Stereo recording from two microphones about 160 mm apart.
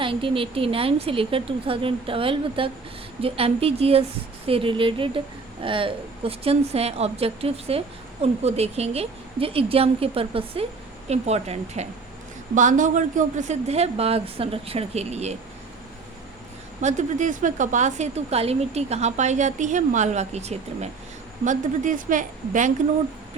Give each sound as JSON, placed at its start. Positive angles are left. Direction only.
{"t": 0.0, "sound": "a woman's voice", "side_deg": -35}
{"t": 16.8, "sound": "a woman's voice", "side_deg": -50}